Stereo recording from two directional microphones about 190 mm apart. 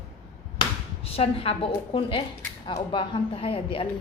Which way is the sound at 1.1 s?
30° left (ahead or behind).